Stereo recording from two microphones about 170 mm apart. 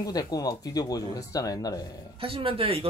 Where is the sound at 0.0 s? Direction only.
20° left (ahead or behind).